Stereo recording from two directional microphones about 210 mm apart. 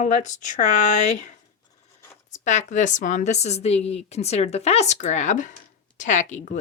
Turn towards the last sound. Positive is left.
turn(degrees=35)  # may be behind; listen again after turning